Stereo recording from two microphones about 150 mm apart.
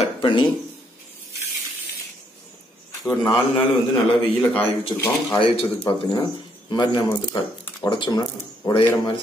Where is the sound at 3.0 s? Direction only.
25° left (ahead or behind).